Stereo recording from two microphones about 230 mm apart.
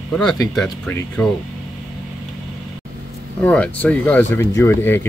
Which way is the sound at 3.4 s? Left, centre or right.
Centre.